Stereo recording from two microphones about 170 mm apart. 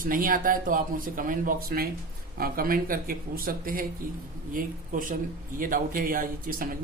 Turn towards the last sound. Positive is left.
turn(degrees=-55)  # may be behind; listen again after turning